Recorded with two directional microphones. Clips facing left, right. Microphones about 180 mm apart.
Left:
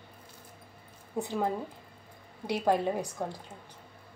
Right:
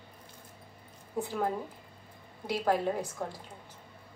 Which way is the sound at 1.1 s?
20° left (ahead or behind).